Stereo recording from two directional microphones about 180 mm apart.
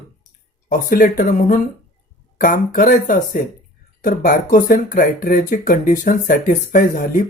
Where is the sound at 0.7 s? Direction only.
50° left (ahead or behind).